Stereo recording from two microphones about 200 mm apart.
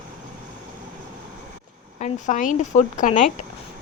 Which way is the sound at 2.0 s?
35° left (ahead or behind).